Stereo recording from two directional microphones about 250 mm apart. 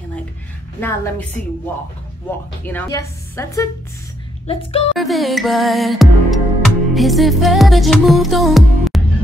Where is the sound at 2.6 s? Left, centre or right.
Centre.